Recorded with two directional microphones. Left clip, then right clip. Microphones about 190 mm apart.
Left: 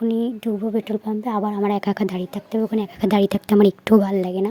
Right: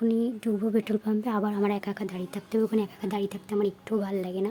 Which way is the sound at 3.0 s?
40° left (ahead or behind).